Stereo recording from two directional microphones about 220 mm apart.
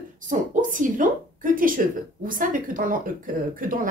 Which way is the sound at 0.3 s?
35° right (ahead or behind).